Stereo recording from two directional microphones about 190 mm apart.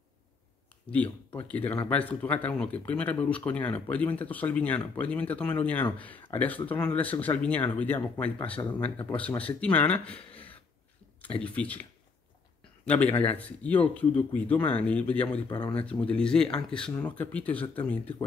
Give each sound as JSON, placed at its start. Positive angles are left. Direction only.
{"t": 0.8, "sound": "speech", "side_deg": 10}
{"t": 10.1, "sound": "a sound", "side_deg": 30}
{"t": 11.4, "sound": "a man's voice", "side_deg": 5}
{"t": 15.4, "sound": "speech", "side_deg": 25}
{"t": 15.9, "sound": "speech", "side_deg": 5}